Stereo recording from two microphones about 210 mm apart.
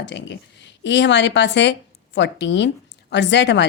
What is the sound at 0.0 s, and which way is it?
Speech, 55° left (ahead or behind).